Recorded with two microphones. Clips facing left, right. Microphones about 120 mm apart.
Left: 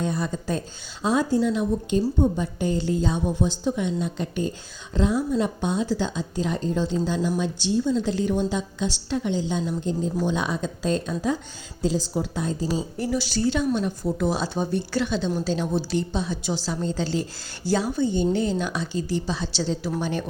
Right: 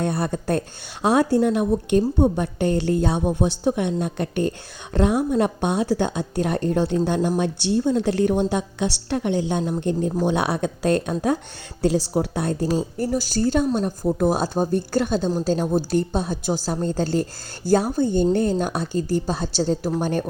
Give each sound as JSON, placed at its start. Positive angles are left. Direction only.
{"t": 0.0, "sound": "a woman's voice", "side_deg": -60}